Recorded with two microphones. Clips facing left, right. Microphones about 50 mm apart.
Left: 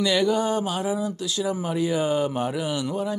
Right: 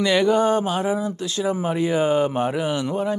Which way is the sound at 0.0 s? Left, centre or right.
Right.